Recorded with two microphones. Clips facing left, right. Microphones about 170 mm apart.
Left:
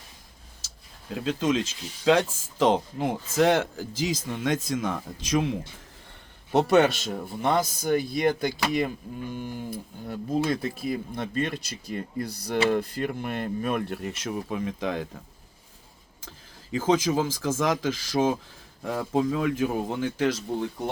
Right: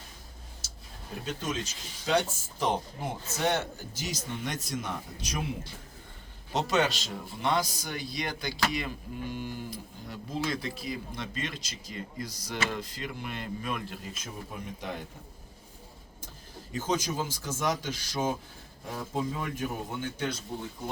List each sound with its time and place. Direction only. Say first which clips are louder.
0.6 s a sound: right 3 dB; 90° left
1.1 s speech: left 9 dB; 90° left
6.5 s a man's voice: left 8 dB; 55° left (ahead or behind); by 15.0 s 90° left
16.7 s speech: left 8 dB; 90° left